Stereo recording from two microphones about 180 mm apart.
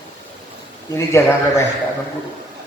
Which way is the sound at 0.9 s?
15° left (ahead or behind).